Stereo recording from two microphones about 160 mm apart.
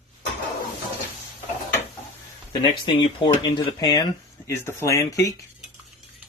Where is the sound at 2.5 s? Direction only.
30° left (ahead or behind).